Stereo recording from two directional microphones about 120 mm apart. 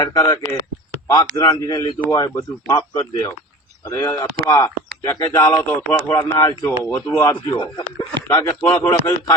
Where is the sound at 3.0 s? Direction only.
25° left (ahead or behind).